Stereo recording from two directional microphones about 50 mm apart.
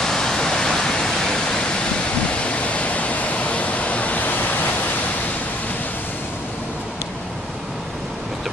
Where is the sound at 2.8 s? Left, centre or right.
Left.